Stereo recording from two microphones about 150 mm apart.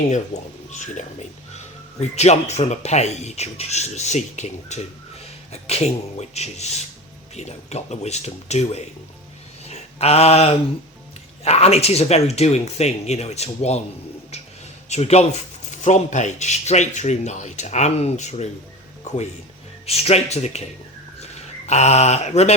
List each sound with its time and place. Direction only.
0.7 s speech: 55° left (ahead or behind)
9.6 s a sound: 45° left (ahead or behind)
11.4 s speech: 45° left (ahead or behind)
14.8 s speech: 45° left (ahead or behind)
19.8 s speech: 45° left (ahead or behind)